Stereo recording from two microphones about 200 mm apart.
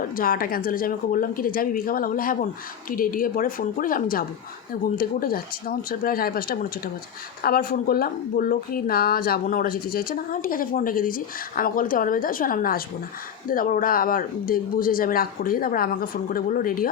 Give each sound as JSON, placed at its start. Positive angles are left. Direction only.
{"t": 0.0, "sound": "a woman's voice", "side_deg": 45}